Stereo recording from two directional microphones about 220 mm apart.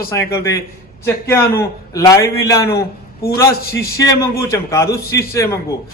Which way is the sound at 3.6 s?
45° left (ahead or behind).